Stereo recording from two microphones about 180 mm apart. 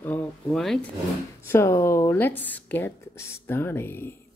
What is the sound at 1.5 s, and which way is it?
Speech, 15° left (ahead or behind).